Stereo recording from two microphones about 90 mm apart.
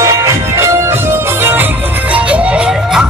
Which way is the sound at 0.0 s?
35° right (ahead or behind).